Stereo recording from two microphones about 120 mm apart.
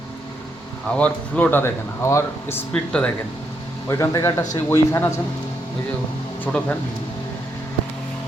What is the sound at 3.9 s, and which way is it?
A man's voice, 25° left (ahead or behind).